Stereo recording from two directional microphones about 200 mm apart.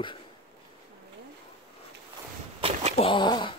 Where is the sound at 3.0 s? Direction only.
25° left (ahead or behind).